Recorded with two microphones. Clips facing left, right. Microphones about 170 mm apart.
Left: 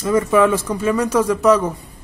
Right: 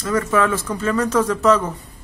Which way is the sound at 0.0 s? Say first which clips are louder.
Left 4 dB; 15° left (ahead or behind).